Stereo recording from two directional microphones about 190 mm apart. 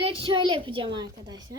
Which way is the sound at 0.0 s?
25° right (ahead or behind).